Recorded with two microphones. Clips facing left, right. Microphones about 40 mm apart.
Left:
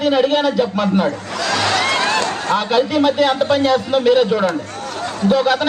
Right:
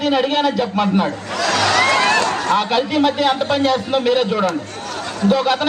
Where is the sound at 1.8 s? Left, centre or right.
Right.